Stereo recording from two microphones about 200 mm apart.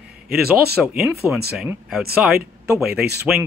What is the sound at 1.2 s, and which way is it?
Speech, 10° right (ahead or behind).